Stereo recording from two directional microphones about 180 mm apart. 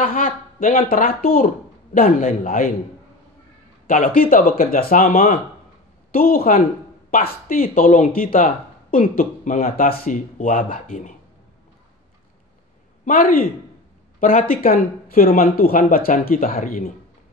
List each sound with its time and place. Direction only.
0.0 s speech: 50° left (ahead or behind)
3.8 s speech: 50° left (ahead or behind)
13.0 s speech: 50° left (ahead or behind)
14.5 s speech: 50° left (ahead or behind)